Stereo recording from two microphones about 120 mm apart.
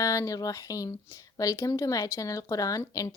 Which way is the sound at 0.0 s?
30° left (ahead or behind).